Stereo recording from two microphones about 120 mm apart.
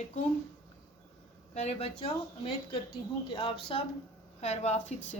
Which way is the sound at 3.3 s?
50° left (ahead or behind).